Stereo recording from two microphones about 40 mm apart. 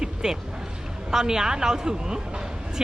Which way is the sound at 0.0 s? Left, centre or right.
Centre.